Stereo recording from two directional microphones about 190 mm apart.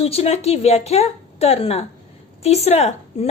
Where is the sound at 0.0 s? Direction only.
30° left (ahead or behind).